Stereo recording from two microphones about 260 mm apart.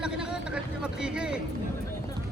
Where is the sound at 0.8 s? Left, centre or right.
Centre.